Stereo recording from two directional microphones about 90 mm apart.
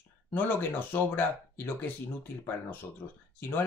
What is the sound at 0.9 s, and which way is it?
Speech, 20° left (ahead or behind).